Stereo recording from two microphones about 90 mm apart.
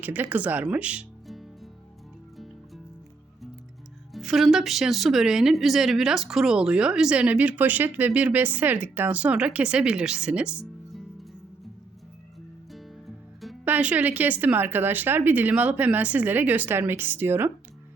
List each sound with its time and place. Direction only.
0.0 s speech: 20° right (ahead or behind)
4.1 s speech: centre (ahead or behind)
12.7 s music: centre (ahead or behind)
13.7 s speech: 20° right (ahead or behind)